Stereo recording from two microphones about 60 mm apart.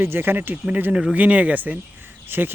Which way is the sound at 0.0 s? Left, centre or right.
Right.